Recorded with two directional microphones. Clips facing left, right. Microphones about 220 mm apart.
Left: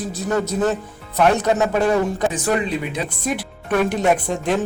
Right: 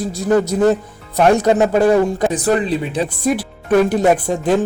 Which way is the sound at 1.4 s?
35° right (ahead or behind).